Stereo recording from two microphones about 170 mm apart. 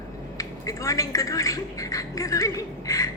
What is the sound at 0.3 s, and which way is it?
Speech, 20° left (ahead or behind).